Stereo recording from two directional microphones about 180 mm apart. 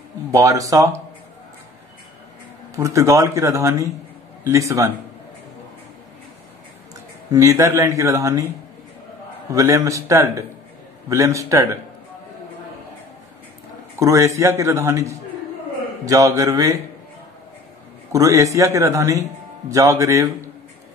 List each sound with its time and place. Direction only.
0.3 s speech: 20° right (ahead or behind)
2.7 s speech: 15° right (ahead or behind)
7.3 s speech: 15° right (ahead or behind)
9.5 s speech: 20° right (ahead or behind)
13.9 s speech: 15° right (ahead or behind)
18.1 s speech: 20° right (ahead or behind)